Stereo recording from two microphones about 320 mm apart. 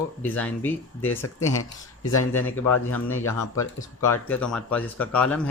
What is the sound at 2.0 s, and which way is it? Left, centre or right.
Speech, left.